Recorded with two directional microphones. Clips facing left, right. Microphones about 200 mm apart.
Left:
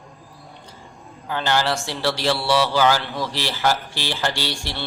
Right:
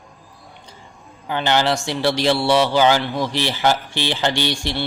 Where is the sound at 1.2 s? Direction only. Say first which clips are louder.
Right 3 dB; 20° right (ahead or behind).